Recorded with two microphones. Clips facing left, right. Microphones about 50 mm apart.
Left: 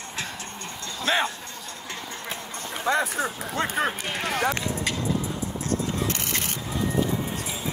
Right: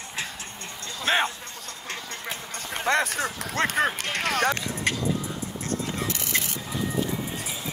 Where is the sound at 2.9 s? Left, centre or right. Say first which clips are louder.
Even; right.